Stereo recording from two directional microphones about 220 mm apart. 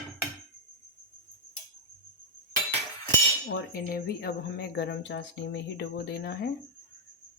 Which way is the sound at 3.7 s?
45° left (ahead or behind).